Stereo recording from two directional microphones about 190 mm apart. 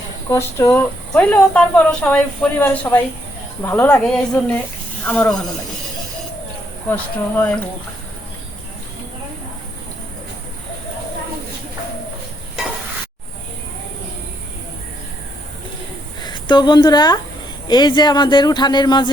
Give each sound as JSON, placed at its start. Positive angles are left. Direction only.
{"t": 0.3, "sound": "a woman's voice", "side_deg": 15}
{"t": 6.9, "sound": "a woman's voice", "side_deg": 5}
{"t": 16.2, "sound": "a woman's voice", "side_deg": 25}